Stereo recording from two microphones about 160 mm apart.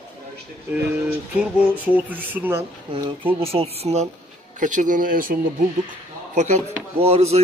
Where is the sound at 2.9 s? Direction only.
35° right (ahead or behind).